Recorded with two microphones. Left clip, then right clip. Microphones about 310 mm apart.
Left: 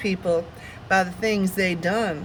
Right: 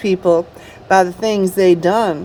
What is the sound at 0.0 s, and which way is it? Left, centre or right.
Speech, right.